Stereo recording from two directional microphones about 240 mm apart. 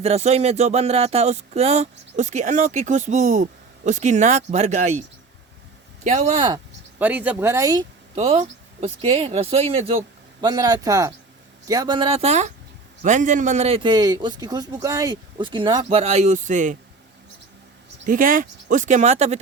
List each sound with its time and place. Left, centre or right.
0.0 s speech: right
6.1 s speech: right
7.0 s a man's voice: centre; by 16.7 s right
18.0 s speech: right